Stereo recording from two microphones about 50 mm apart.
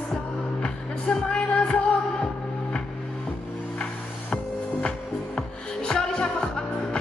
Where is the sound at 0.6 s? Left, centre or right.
Centre.